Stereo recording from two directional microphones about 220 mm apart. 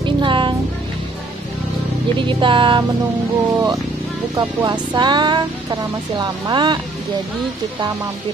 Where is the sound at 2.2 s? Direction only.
20° right (ahead or behind).